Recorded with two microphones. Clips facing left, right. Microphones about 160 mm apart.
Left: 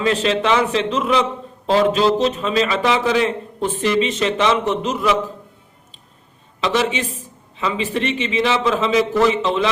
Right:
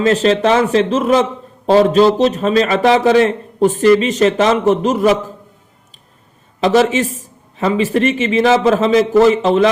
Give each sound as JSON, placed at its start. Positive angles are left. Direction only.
{"t": 0.0, "sound": "a man's voice", "side_deg": -40}
{"t": 6.6, "sound": "a man's voice", "side_deg": -40}